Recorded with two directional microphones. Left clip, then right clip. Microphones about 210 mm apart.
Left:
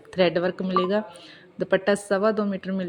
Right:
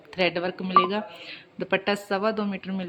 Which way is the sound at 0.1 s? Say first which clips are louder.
Left 3 dB; 20° left (ahead or behind).